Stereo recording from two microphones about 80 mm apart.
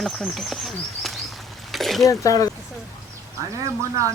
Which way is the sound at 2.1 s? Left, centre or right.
Left.